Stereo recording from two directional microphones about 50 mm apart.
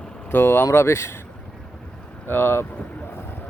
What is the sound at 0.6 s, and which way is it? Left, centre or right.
Speech, left.